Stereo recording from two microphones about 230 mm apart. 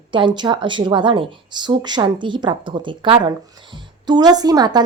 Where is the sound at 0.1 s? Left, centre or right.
Right.